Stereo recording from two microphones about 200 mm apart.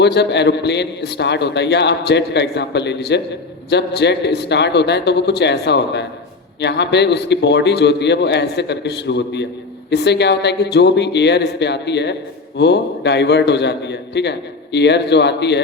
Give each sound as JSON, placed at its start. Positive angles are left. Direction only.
{"t": 0.0, "sound": "a man's voice", "side_deg": 60}